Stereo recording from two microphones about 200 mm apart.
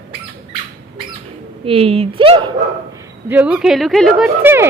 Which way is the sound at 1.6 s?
30° right (ahead or behind).